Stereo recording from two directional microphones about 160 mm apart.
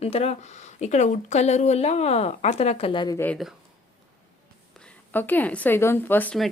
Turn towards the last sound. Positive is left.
turn(degrees=10)  # may be behind; listen again after turning